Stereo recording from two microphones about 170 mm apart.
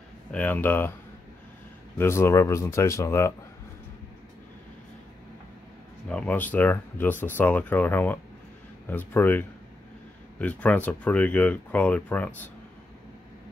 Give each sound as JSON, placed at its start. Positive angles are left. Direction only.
{"t": 0.3, "sound": "speech", "side_deg": 10}
{"t": 2.0, "sound": "speech", "side_deg": 15}
{"t": 6.0, "sound": "speech", "side_deg": 5}